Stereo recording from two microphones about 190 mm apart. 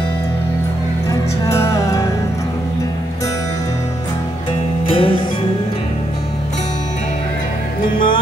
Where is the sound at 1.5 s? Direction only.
15° left (ahead or behind).